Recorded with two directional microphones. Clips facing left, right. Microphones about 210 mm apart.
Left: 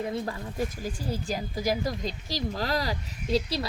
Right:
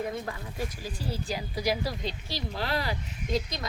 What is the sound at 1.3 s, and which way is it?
Speech, 45° left (ahead or behind).